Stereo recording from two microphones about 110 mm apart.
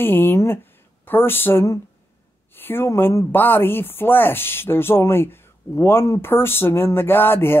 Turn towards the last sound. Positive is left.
turn(degrees=20)  # may be behind; listen again after turning